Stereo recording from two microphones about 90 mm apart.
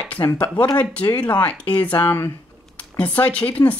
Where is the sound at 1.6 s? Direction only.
85° left.